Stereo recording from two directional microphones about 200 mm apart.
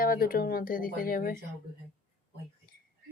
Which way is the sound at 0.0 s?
45° left (ahead or behind).